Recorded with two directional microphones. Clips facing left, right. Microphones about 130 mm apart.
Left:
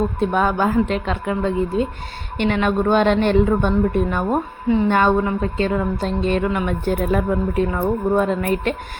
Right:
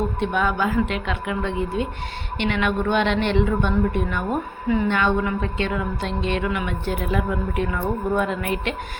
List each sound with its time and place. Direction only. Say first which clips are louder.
0.2 s a woman's voice: left 4 dB; 40° left (ahead or behind)
4.9 s a woman's voice: left 4 dB; 45° left (ahead or behind)